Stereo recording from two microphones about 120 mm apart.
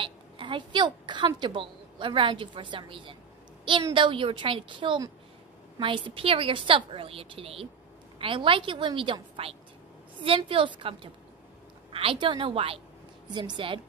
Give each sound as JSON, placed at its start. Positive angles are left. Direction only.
{"t": 0.0, "sound": "a woman's voice", "side_deg": -45}
{"t": 13.3, "sound": "a woman's voice", "side_deg": -40}